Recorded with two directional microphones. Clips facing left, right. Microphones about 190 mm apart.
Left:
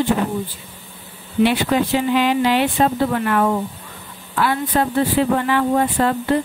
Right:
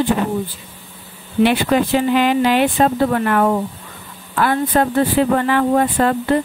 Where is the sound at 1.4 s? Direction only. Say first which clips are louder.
Right 2 dB; 55° right (ahead or behind).